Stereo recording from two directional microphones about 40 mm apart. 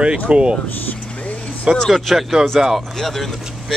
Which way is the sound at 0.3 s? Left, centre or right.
Right.